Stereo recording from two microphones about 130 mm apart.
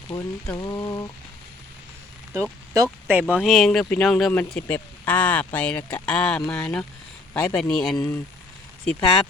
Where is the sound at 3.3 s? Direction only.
Centre (ahead or behind).